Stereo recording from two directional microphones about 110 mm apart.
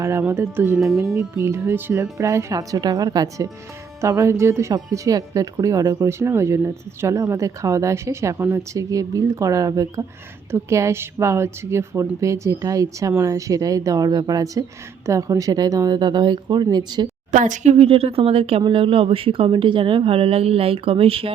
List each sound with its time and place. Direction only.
0.0 s speech: 25° right (ahead or behind)
0.8 s speech: 5° right (ahead or behind)
1.1 s speech: 25° right (ahead or behind)
17.6 s a woman's voice: 80° right; by 18.6 s 65° right (ahead or behind)
18.6 s a woman's voice: 50° right (ahead or behind)